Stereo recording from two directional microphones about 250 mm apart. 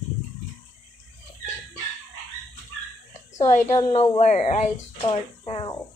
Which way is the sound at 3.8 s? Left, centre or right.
Centre.